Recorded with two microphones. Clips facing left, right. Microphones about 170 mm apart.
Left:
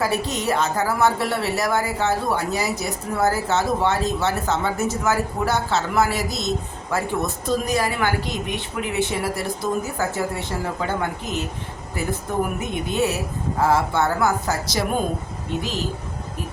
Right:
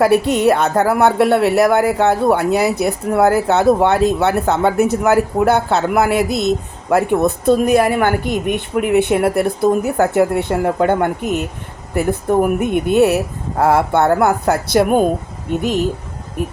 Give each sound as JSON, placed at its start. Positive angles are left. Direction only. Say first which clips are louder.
{"t": 0.0, "sound": "speech", "louder": "right 11 dB", "side_deg": -60}